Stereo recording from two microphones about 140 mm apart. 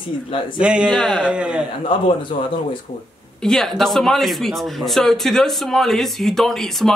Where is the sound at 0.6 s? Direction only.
5° right (ahead or behind).